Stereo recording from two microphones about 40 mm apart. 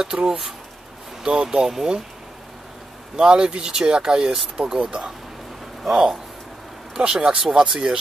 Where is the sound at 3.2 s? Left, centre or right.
Right.